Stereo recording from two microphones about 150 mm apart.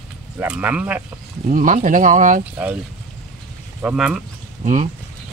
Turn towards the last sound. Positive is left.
turn(degrees=-55)  # may be behind; listen again after turning